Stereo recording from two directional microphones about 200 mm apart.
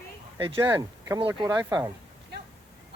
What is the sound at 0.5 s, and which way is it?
Speech, 10° right (ahead or behind).